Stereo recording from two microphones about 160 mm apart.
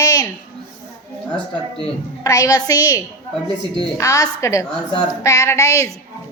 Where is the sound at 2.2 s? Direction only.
20° left (ahead or behind).